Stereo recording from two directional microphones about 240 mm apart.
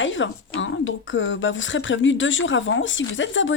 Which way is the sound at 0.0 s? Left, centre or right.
Left.